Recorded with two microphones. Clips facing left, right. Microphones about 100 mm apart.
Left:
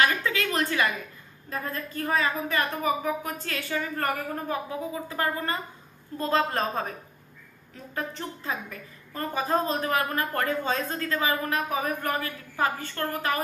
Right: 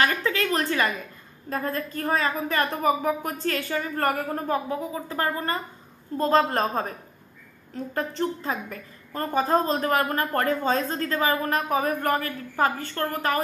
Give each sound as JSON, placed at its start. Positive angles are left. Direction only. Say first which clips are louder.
{"t": 0.0, "sound": "a woman's voice", "louder": "right 1 dB", "side_deg": -40}
{"t": 8.5, "sound": "a woman's voice", "louder": "right 3 dB", "side_deg": -40}